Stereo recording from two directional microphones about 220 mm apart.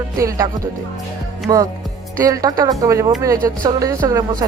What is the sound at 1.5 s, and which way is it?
Speech, 15° right (ahead or behind).